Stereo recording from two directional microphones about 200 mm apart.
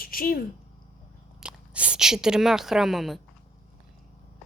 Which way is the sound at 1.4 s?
5° right (ahead or behind).